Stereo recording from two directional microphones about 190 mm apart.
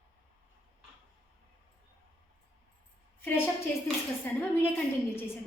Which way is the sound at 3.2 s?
10° left (ahead or behind).